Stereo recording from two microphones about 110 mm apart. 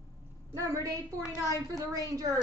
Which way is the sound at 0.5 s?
30° right (ahead or behind).